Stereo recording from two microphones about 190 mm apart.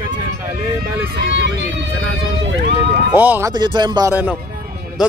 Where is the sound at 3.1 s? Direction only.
10° right (ahead or behind).